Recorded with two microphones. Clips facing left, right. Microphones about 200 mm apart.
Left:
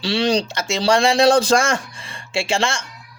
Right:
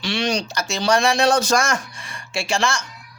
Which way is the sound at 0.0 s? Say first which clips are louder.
Left 4 dB; 35° left (ahead or behind).